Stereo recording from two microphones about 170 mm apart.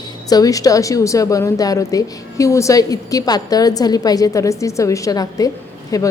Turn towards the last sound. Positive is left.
turn(degrees=20)  # may be behind; listen again after turning